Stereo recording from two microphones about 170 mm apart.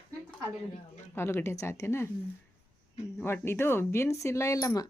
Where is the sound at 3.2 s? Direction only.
15° left (ahead or behind).